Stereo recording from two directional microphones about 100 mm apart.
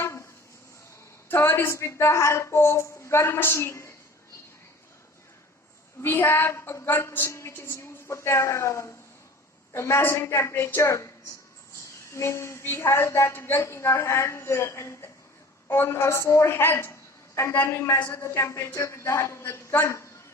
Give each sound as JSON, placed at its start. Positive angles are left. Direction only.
{"t": 0.0, "sound": "a sound", "side_deg": 30}
{"t": 1.3, "sound": "a woman's voice", "side_deg": 25}
{"t": 6.0, "sound": "a woman's voice", "side_deg": 25}
{"t": 12.1, "sound": "a woman's voice", "side_deg": 30}